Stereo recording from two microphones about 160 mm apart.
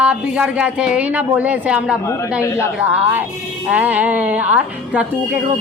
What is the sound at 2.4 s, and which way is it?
Speech, 20° left (ahead or behind).